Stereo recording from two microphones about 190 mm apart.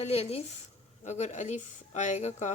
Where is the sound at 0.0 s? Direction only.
35° left (ahead or behind).